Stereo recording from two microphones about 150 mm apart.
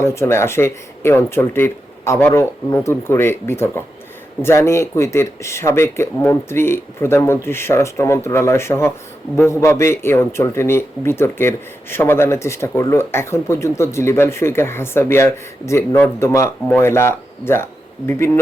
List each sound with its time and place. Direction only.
0.0 s a man's voice: 15° left (ahead or behind)